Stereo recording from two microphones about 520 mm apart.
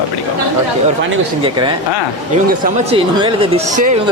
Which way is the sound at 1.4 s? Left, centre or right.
Centre.